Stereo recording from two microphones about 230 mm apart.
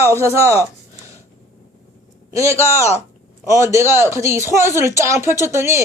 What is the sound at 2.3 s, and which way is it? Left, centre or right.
Speech, centre.